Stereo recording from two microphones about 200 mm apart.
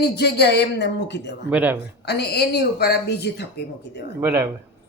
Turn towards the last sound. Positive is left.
turn(degrees=-10)  # may be behind; listen again after turning